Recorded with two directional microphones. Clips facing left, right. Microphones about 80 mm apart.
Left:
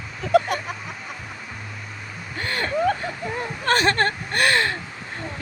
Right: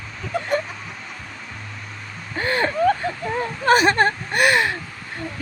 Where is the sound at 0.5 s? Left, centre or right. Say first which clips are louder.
Right 5 dB; left.